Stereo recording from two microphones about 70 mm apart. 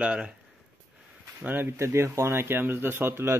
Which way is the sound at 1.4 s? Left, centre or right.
Right.